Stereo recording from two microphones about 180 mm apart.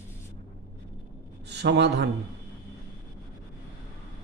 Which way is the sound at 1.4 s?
70° right (ahead or behind).